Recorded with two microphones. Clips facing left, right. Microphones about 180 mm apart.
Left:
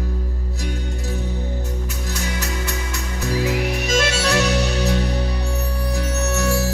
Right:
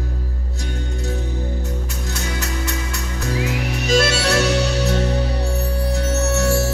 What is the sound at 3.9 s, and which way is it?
Music, 35° right (ahead or behind).